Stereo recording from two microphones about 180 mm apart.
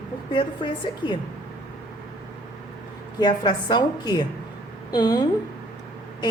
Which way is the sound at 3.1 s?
25° left (ahead or behind).